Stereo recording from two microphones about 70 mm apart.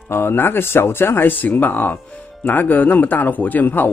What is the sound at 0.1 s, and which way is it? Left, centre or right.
A man's voice, left.